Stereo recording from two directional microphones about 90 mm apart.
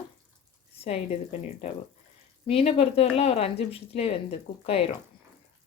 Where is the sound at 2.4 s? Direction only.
90° left.